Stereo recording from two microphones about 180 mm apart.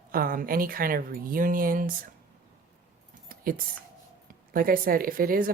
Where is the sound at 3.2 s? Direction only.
50° right (ahead or behind).